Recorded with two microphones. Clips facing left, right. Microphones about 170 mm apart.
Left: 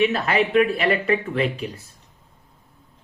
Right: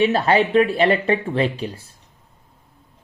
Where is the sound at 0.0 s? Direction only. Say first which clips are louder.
Right 3 dB; 30° right (ahead or behind).